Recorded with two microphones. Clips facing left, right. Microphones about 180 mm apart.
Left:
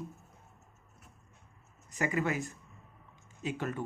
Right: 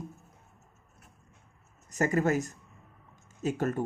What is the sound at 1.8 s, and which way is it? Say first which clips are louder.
A man's voice: right 5 dB; 45° right (ahead or behind).